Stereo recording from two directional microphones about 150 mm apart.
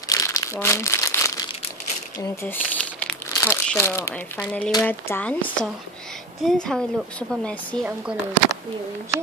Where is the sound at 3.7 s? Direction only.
15° left (ahead or behind).